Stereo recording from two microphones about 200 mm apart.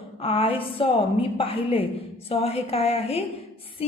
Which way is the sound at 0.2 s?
25° left (ahead or behind).